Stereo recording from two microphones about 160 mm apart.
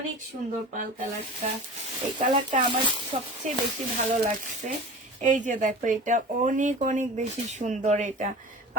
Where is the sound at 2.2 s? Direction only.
30° right (ahead or behind).